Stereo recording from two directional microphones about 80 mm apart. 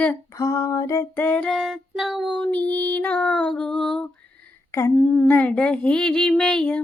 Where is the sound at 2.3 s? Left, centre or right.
Centre.